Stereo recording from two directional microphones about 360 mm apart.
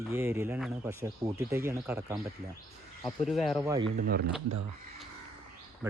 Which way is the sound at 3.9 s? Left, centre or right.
Right.